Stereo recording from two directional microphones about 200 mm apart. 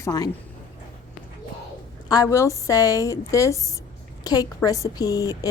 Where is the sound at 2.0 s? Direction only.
20° left (ahead or behind).